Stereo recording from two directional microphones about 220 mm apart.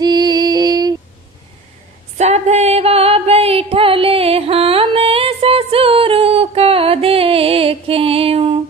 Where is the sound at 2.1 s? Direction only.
30° right (ahead or behind).